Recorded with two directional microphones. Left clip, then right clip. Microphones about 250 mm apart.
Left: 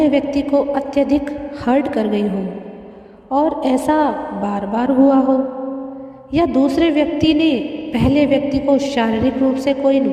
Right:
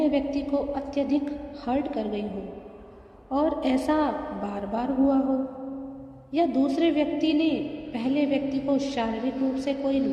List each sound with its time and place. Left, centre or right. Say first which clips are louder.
0.0 s a man's voice: left 9 dB; left
3.3 s a man's voice: left 9 dB; left